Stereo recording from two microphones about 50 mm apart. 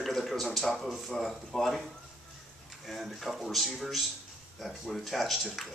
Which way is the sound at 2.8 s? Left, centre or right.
Centre.